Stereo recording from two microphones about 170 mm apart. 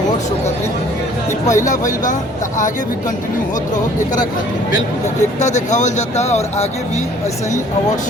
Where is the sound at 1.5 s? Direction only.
45° left (ahead or behind).